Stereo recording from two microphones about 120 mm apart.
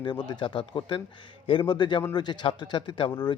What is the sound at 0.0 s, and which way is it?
Speech, 40° left (ahead or behind).